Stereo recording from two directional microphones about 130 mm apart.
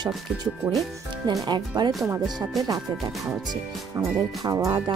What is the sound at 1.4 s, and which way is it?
Speech, 35° right (ahead or behind).